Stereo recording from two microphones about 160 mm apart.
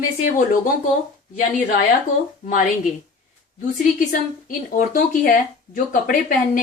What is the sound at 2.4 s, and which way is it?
Speech, 55° left (ahead or behind).